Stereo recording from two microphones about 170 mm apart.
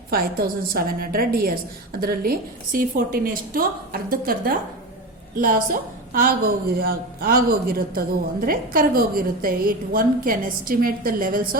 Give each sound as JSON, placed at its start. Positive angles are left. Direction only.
{"t": 0.1, "sound": "a woman's voice", "side_deg": -60}